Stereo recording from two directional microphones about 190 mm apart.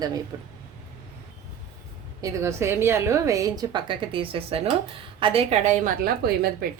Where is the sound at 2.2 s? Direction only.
15° right (ahead or behind); by 5.9 s 35° right (ahead or behind).